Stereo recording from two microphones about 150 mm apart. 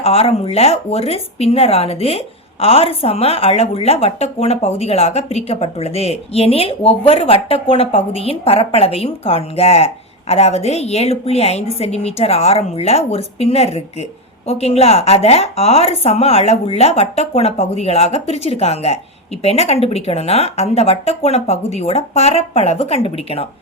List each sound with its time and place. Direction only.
0.0 s speech: 40° left (ahead or behind)